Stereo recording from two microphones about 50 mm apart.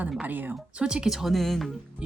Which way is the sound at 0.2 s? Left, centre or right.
Right.